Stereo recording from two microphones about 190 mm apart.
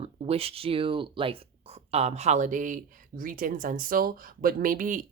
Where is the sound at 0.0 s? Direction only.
30° right (ahead or behind).